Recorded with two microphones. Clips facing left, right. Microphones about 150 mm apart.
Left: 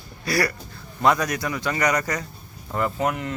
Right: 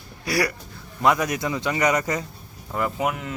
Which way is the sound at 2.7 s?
5° right (ahead or behind).